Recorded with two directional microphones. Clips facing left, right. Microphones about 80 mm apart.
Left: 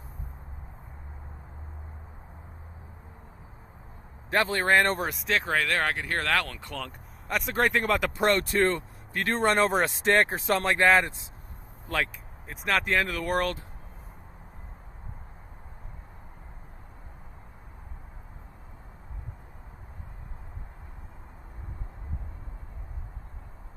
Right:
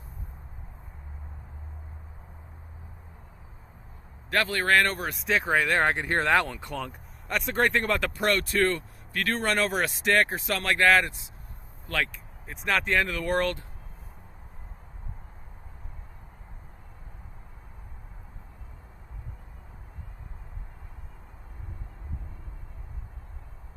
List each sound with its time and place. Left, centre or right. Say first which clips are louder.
4.3 s speech: left 1 dB; left
5.1 s speech: right 1 dB; centre
5.5 s speech: right 5 dB; centre
7.3 s speech: even; centre
8.2 s speech: left 1 dB; left
12.5 s speech: even; centre